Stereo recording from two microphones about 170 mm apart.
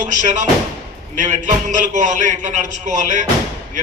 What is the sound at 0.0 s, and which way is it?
Speech, 45° right (ahead or behind).